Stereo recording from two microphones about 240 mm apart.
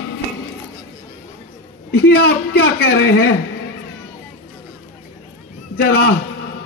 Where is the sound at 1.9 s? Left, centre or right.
Left.